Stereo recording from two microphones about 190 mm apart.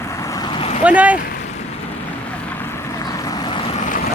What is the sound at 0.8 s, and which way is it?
Speech, 5° right (ahead or behind).